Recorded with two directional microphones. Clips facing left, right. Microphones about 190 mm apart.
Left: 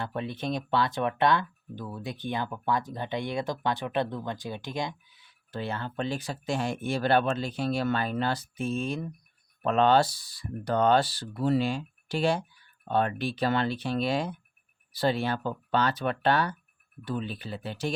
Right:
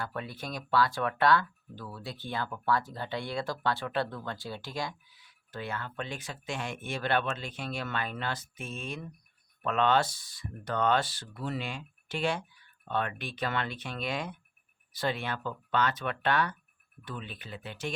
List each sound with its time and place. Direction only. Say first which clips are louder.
0.0 s speech: left 5 dB; 25° left (ahead or behind)